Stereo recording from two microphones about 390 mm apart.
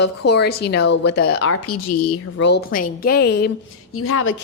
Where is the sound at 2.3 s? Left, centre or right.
Left.